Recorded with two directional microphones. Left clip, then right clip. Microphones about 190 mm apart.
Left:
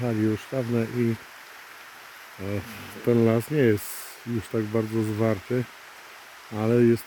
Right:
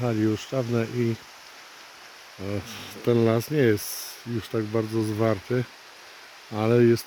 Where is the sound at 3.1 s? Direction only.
Centre (ahead or behind).